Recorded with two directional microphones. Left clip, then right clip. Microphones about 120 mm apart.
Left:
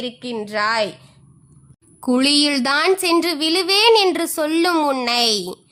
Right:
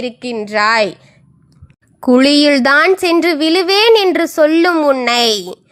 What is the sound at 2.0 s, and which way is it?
A woman's voice, 45° right (ahead or behind).